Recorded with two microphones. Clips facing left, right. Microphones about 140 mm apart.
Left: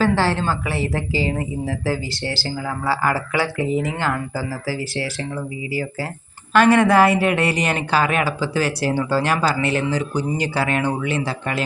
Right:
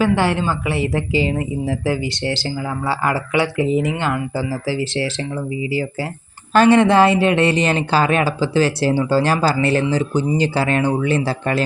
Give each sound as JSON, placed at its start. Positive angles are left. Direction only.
{"t": 0.0, "sound": "speech", "side_deg": -15}
{"t": 6.5, "sound": "speech", "side_deg": -25}